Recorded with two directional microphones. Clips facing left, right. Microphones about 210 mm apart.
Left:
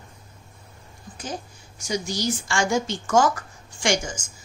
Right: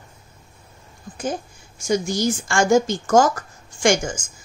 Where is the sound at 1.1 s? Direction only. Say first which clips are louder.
Right 7 dB; 50° right (ahead or behind).